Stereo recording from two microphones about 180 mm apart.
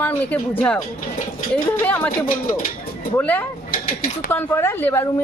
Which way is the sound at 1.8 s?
10° left (ahead or behind).